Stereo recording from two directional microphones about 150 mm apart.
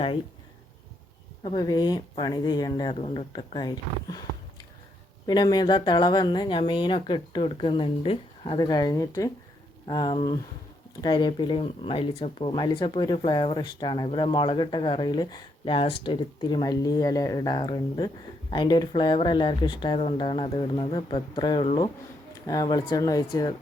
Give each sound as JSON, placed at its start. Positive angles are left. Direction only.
{"t": 1.6, "sound": "speech", "side_deg": 25}
{"t": 8.6, "sound": "speech", "side_deg": 25}
{"t": 9.8, "sound": "speech", "side_deg": 35}